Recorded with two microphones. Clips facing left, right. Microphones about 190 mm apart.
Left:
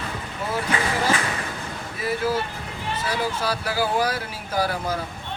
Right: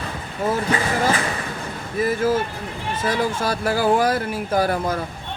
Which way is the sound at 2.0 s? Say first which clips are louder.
Right 5 dB; 45° right (ahead or behind).